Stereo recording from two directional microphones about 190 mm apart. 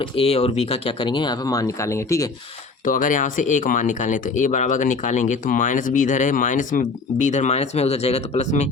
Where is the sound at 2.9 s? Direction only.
45° left (ahead or behind).